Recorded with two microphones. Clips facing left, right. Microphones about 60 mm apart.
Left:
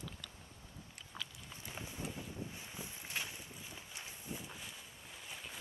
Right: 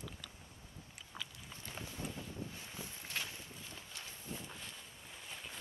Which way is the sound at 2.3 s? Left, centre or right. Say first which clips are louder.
Even; centre.